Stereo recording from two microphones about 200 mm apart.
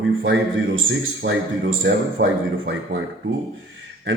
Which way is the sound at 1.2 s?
65° right (ahead or behind).